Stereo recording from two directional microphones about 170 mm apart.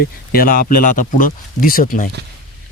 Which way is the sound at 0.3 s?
55° left (ahead or behind).